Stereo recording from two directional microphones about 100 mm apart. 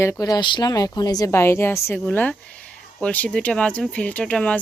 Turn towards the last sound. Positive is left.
turn(degrees=10)  # may be behind; listen again after turning